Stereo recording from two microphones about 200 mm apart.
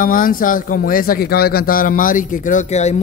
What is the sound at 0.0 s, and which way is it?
Speech, 45° left (ahead or behind).